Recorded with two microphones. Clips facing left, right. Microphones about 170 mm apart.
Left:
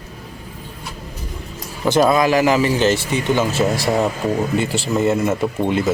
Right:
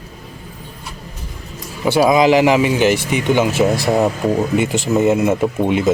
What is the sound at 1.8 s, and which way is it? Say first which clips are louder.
Speech: right 2 dB; 10° right (ahead or behind).